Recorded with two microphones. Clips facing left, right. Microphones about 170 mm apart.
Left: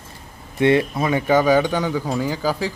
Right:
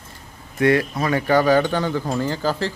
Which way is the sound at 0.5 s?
25° left (ahead or behind).